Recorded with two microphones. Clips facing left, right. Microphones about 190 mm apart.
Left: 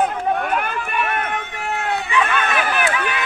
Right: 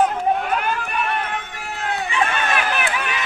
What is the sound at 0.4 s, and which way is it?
Run, 55° left (ahead or behind).